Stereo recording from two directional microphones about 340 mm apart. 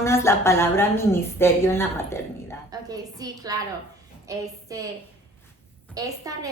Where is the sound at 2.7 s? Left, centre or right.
Centre.